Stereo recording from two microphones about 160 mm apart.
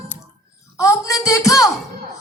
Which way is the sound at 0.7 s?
20° left (ahead or behind).